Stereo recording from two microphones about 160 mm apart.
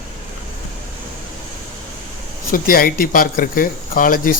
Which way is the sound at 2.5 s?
65° left (ahead or behind).